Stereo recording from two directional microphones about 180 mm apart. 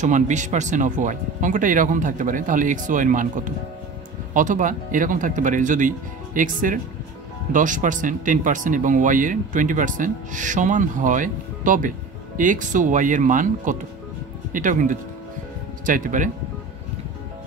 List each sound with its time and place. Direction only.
0.0 s speech: 45° right (ahead or behind)